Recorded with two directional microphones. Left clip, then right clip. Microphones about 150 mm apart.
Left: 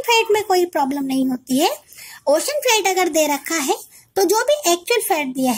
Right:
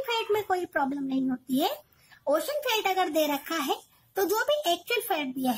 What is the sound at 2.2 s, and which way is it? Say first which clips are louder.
A child's voice: left 10 dB; 25° left (ahead or behind).